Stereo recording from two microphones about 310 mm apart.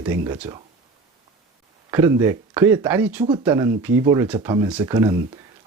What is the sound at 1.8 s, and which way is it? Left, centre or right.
Speech, centre.